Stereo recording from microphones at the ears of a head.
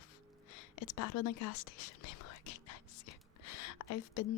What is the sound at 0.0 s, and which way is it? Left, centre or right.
Music, left.